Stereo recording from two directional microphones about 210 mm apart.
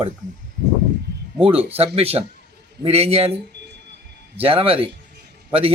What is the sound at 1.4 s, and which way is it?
A man's voice, 25° right (ahead or behind).